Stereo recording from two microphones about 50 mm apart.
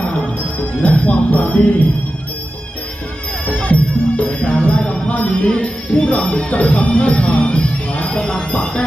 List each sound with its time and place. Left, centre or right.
0.8 s music: left
3.4 s music: left
5.5 s speech: left